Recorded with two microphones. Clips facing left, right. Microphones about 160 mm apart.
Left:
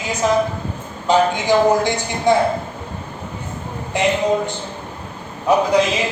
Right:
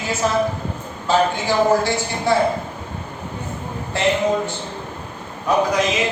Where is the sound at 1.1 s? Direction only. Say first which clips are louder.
Left 3 dB; 15° left (ahead or behind).